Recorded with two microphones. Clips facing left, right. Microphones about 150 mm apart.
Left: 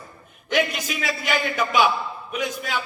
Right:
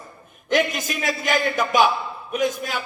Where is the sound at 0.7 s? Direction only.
45° right (ahead or behind).